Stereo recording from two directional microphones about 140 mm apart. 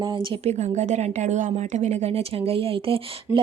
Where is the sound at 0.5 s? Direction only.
55° right (ahead or behind).